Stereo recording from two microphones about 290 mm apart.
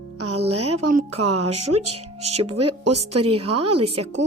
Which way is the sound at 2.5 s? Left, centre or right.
Right.